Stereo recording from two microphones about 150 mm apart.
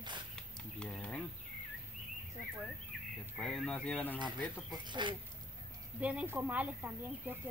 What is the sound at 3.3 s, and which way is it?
Speech, 5° left (ahead or behind).